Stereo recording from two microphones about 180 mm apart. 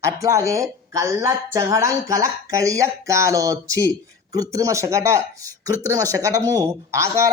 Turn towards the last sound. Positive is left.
turn(degrees=-15)  # may be behind; listen again after turning